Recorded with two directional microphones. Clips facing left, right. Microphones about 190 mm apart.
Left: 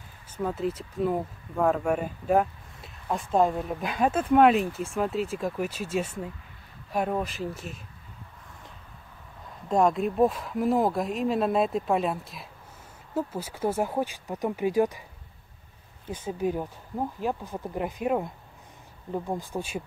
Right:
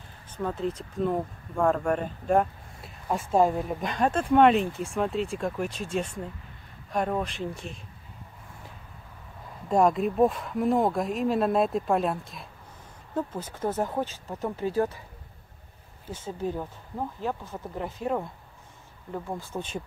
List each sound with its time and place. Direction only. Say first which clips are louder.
0.3 s speech: left 1 dB; 5° left (ahead or behind)
9.7 s speech: right 1 dB; centre (ahead or behind); by 15.0 s 15° left (ahead or behind)
16.1 s speech: left 3 dB; 15° left (ahead or behind)